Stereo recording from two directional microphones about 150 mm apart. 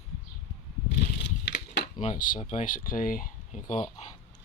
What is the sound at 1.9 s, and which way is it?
Speech, 35° left (ahead or behind).